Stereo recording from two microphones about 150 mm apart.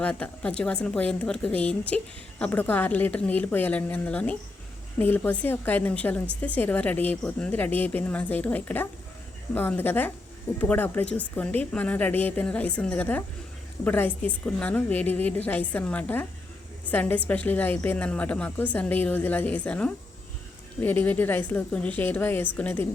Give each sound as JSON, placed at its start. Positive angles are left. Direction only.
{"t": 0.0, "sound": "a woman's voice", "side_deg": 10}